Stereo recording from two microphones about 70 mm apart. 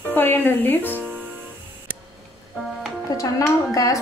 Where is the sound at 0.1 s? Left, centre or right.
Left.